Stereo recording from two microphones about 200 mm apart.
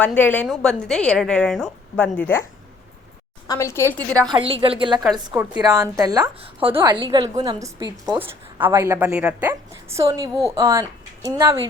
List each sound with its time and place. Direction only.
0.0 s a woman's voice: 10° left (ahead or behind)
3.4 s a woman's voice: 15° left (ahead or behind)
4.2 s a woman's voice: 25° right (ahead or behind)